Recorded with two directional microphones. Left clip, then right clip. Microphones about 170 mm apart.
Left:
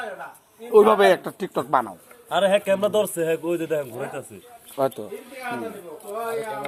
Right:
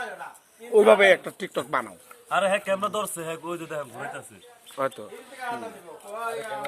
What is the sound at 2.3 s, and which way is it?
A man's voice, 30° right (ahead or behind).